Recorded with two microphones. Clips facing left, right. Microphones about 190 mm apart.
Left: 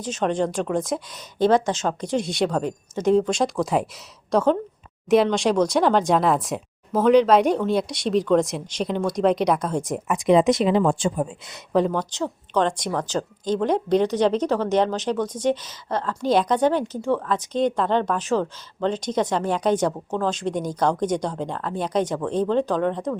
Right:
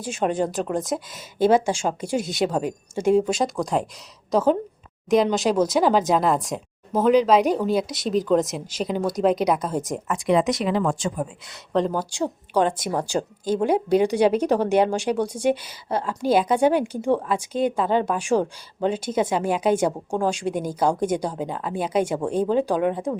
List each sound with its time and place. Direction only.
0.0 s speech: 10° right (ahead or behind)
10.1 s a woman's voice: 20° left (ahead or behind)
11.9 s speech: 10° right (ahead or behind)